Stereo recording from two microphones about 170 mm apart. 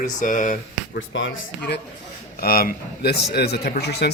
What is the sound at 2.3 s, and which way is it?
A man's voice, 60° left (ahead or behind).